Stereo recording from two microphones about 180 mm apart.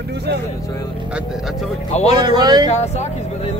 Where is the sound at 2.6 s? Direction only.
40° left (ahead or behind).